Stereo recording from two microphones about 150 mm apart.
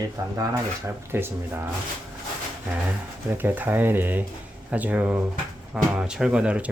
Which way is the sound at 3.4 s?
10° right (ahead or behind).